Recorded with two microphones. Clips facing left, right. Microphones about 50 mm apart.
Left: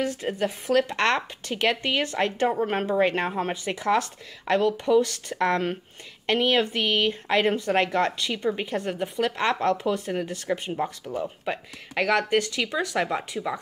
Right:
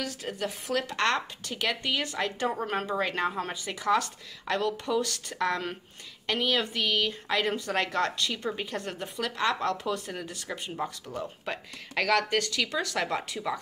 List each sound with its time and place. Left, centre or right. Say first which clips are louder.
0.0 s speech: left 7 dB; left
2.6 s speech: left 6 dB; left
9.2 s speech: left 4 dB; left; by 13.6 s centre